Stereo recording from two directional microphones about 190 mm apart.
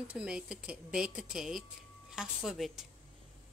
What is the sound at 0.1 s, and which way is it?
Speech, 5° right (ahead or behind).